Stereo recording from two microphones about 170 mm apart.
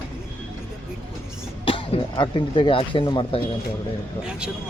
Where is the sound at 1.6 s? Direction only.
30° left (ahead or behind).